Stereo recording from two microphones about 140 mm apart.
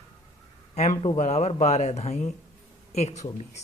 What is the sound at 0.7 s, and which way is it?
Speech, 50° left (ahead or behind).